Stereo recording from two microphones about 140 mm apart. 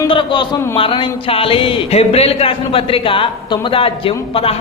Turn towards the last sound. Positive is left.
turn(degrees=40)  # may be behind; listen again after turning